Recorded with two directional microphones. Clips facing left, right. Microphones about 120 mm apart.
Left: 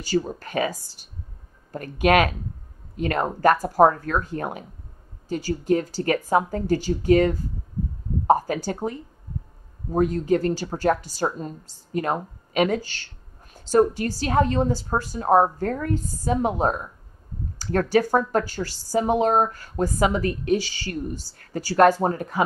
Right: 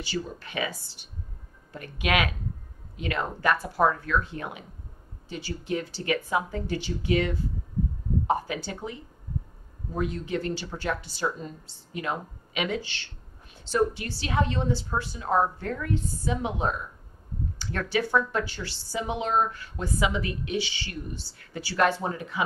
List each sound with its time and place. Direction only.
0.0 s speech: 40° left (ahead or behind)